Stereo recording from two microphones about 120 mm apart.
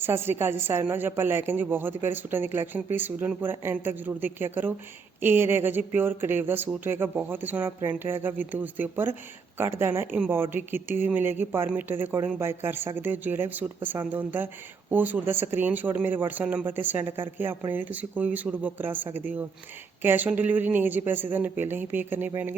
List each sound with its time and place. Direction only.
0.0 s a woman's voice: 20° right (ahead or behind)